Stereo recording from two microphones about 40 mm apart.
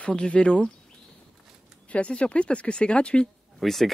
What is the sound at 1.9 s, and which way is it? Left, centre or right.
Speech, left.